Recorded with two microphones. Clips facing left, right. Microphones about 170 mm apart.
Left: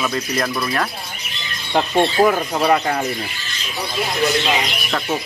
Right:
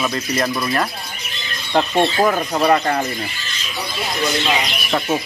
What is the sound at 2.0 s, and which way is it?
Speech, centre (ahead or behind).